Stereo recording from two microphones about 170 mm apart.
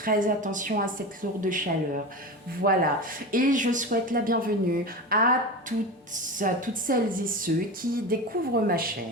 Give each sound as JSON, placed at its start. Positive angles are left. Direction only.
{"t": 0.0, "sound": "speech", "side_deg": -55}